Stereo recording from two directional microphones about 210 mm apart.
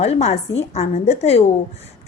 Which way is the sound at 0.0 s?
30° left (ahead or behind).